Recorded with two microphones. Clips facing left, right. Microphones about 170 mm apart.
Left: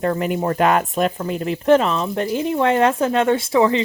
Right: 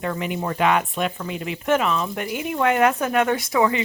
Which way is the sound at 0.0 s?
40° left (ahead or behind).